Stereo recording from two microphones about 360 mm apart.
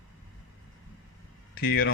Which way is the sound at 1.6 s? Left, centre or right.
Left.